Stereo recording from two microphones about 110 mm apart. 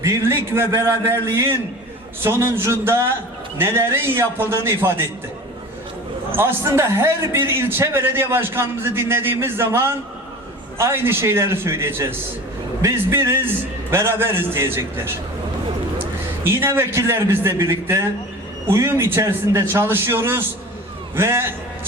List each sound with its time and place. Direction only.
0.0 s a man's voice: 25° right (ahead or behind)
6.3 s a man's voice: 20° right (ahead or behind)
16.4 s a man's voice: 20° right (ahead or behind)